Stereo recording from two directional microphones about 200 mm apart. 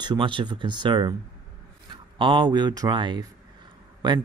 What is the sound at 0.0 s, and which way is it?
Speech, 25° right (ahead or behind).